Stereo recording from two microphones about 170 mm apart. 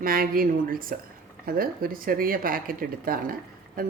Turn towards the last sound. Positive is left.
turn(degrees=-60)  # may be behind; listen again after turning